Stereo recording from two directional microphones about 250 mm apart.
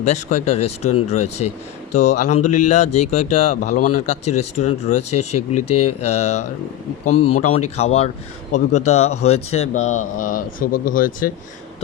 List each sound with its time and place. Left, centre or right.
0.0 s speech: left
5.6 s speech: left
6.1 s speech: left
7.1 s speech: left
7.4 s speech: left